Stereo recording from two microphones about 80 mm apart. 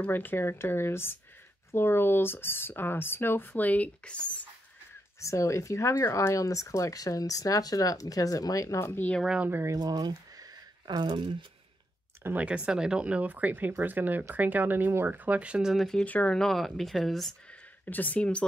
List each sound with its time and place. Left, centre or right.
0.0 s speech: left
5.2 s speech: left
8.7 s speech: left
9.4 s speech: right
9.7 s speech: right
10.9 s speech: right
12.2 s speech: right
12.4 s speech: centre
15.7 s speech: centre
16.0 s speech: centre
16.3 s speech: centre
17.8 s speech: left